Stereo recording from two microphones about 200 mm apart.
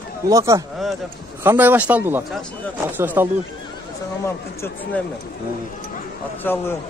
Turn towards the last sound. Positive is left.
turn(degrees=10)  # may be behind; listen again after turning